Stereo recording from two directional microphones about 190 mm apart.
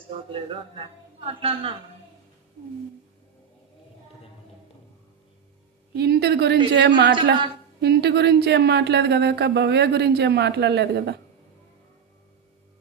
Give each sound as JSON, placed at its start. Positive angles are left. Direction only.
{"t": 0.3, "sound": "a woman's voice", "side_deg": -30}
{"t": 5.9, "sound": "a woman's voice", "side_deg": -60}